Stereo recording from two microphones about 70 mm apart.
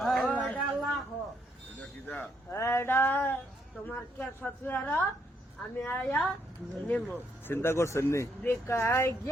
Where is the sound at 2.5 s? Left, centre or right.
Left.